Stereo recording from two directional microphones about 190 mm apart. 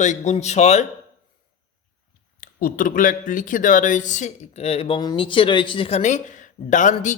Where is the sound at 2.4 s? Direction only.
45° left (ahead or behind).